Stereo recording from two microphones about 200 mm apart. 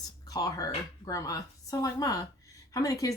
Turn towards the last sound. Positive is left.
turn(degrees=15)  # may be behind; listen again after turning